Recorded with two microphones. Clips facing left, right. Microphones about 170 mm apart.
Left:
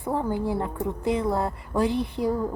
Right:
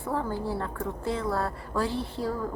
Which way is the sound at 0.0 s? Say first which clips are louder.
Left 4 dB; 15° left (ahead or behind).